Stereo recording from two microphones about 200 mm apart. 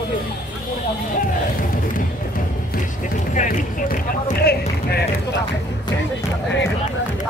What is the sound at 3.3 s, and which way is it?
Run, 40° left (ahead or behind).